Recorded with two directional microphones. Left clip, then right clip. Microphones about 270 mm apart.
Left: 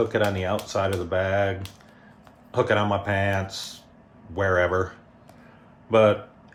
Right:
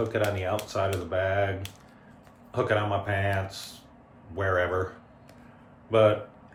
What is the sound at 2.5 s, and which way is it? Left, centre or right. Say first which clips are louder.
Speech: left 4 dB; left.